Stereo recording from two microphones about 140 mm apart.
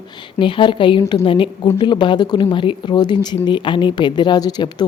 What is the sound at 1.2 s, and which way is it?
A woman's voice, 35° left (ahead or behind).